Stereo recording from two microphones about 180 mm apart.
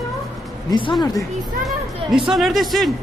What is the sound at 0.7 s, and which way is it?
Speech, 25° left (ahead or behind).